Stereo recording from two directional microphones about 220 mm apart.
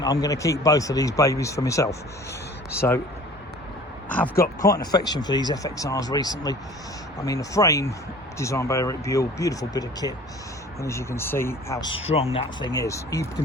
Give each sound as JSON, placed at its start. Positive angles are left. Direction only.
{"t": 0.0, "sound": "speech", "side_deg": 15}
{"t": 4.6, "sound": "speech", "side_deg": 15}